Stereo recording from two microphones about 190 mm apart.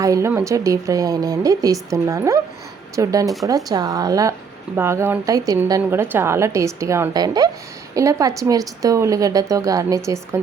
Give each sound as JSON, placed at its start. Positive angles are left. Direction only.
{"t": 0.0, "sound": "a woman's voice", "side_deg": -15}